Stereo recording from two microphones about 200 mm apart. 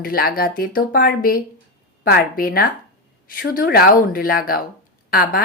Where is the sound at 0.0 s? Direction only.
50° left (ahead or behind).